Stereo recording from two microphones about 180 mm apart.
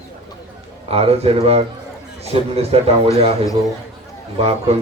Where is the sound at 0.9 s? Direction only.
35° right (ahead or behind).